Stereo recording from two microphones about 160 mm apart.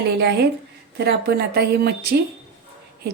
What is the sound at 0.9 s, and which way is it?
Speech, 90° right.